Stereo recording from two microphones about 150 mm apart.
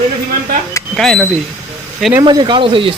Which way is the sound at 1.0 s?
Centre (ahead or behind).